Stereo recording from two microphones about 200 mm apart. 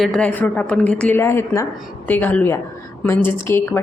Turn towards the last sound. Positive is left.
turn(degrees=10)  # may be behind; listen again after turning